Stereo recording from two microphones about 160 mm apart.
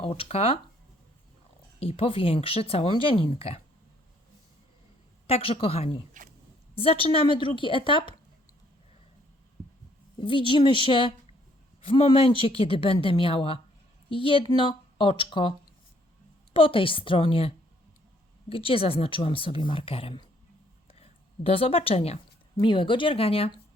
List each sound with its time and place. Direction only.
0.0 s speech: 35° left (ahead or behind)
1.8 s speech: 35° left (ahead or behind)
5.2 s speech: 35° left (ahead or behind)
10.2 s speech: 35° left (ahead or behind)